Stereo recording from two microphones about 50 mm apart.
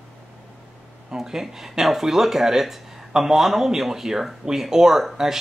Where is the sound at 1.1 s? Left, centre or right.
Centre.